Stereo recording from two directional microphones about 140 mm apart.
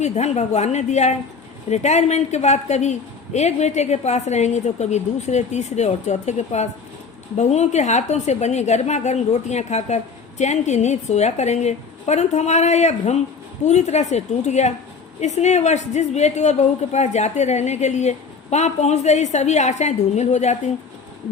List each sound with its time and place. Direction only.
0.0 s a woman's voice: 55° left (ahead or behind)